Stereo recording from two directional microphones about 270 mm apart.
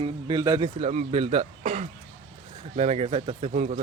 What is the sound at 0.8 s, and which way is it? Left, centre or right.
Speech, right.